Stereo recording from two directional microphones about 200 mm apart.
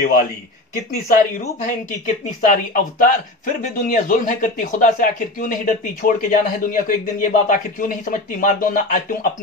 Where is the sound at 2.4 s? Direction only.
45° left (ahead or behind).